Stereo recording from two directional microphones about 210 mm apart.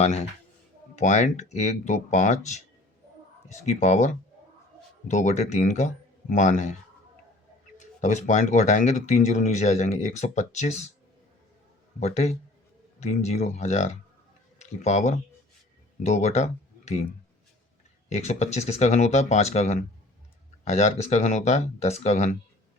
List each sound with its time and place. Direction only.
0.0 s speech: 30° left (ahead or behind)
7.8 s speech: 35° left (ahead or behind)
11.9 s speech: 30° left (ahead or behind)
18.1 s speech: 35° left (ahead or behind)